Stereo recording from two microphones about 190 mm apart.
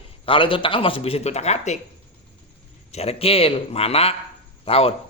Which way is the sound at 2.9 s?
30° left (ahead or behind).